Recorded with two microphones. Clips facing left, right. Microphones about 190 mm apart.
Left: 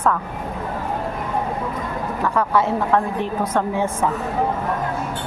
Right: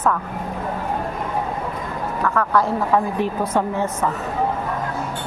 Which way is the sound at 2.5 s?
Centre (ahead or behind).